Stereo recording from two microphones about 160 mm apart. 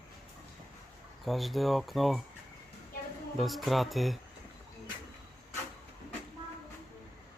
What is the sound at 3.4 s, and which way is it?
Speech, centre (ahead or behind).